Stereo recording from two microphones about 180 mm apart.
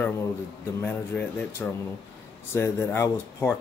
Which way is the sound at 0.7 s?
10° left (ahead or behind).